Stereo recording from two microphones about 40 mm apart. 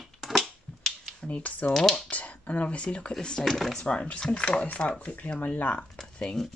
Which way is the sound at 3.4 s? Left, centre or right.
Centre.